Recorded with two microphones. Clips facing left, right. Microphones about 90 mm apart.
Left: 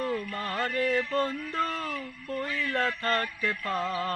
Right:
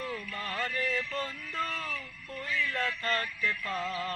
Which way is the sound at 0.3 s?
40° left (ahead or behind).